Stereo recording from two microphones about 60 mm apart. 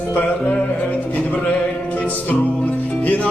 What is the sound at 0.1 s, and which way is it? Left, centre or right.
Music, left.